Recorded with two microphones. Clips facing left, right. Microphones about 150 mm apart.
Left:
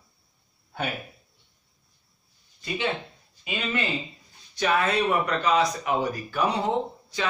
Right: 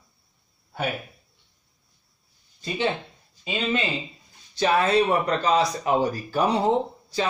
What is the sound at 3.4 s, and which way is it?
Speech, 25° right (ahead or behind).